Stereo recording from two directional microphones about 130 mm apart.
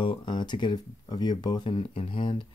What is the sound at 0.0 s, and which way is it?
Speech, 40° left (ahead or behind).